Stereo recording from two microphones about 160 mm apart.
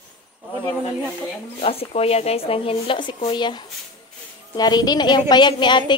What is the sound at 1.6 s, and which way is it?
A woman's voice, 40° left (ahead or behind).